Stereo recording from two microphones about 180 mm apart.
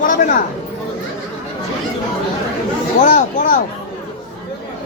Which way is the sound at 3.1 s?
50° left (ahead or behind).